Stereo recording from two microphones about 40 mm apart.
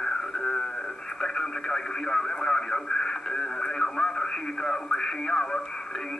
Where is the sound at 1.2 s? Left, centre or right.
Centre.